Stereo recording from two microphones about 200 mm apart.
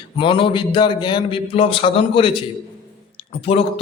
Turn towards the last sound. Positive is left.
turn(degrees=30)  # may be behind; listen again after turning